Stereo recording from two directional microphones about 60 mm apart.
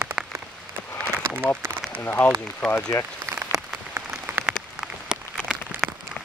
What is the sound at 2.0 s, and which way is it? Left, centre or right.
Speech, left.